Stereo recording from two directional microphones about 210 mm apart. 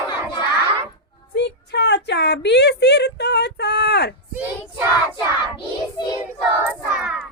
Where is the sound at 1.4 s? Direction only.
55° left (ahead or behind).